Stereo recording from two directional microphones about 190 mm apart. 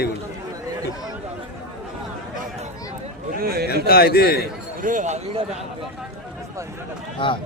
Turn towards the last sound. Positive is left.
turn(degrees=25)  # may be behind; listen again after turning